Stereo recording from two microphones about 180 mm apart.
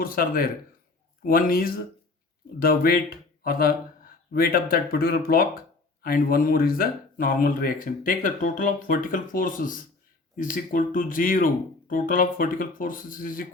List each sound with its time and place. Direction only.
0.0 s speech: 55° left (ahead or behind)